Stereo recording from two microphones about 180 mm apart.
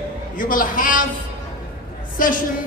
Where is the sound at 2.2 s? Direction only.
50° left (ahead or behind).